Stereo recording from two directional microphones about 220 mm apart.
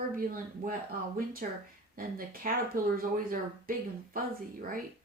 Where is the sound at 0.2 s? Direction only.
40° right (ahead or behind).